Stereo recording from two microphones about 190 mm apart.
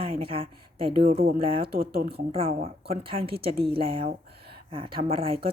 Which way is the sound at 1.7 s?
55° right (ahead or behind).